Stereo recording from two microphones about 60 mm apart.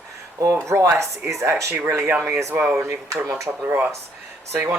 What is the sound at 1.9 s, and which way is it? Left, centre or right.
Speech, right.